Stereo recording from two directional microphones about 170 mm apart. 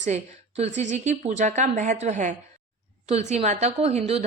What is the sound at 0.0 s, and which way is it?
A woman's voice, 40° right (ahead or behind).